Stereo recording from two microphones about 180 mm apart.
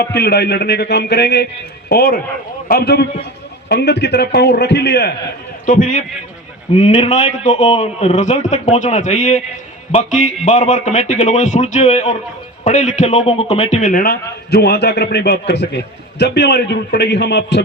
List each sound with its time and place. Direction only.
0.0 s a man's voice: 65° left (ahead or behind)
5.6 s a man's voice: 45° left (ahead or behind); by 17.6 s 70° left (ahead or behind)